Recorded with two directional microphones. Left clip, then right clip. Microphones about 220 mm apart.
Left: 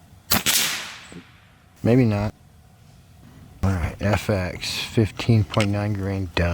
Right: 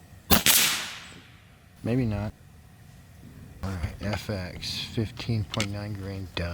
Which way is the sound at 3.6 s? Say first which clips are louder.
Left 10 dB; 40° left (ahead or behind).